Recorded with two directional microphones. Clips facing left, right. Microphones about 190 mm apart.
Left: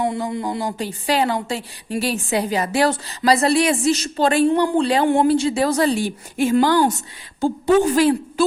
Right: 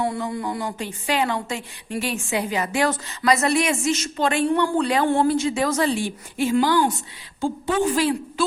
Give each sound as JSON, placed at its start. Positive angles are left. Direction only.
{"t": 0.0, "sound": "a woman's voice", "side_deg": 25}
{"t": 5.0, "sound": "a woman's voice", "side_deg": 20}
{"t": 5.3, "sound": "speech", "side_deg": 35}
{"t": 7.9, "sound": "a woman's voice", "side_deg": 45}